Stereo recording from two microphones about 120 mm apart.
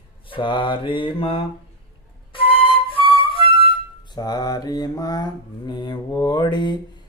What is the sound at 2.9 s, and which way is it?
Flute, 50° left (ahead or behind).